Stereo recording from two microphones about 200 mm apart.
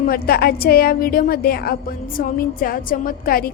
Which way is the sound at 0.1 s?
50° left (ahead or behind).